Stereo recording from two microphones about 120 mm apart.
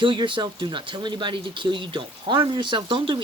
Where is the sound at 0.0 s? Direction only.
45° right (ahead or behind).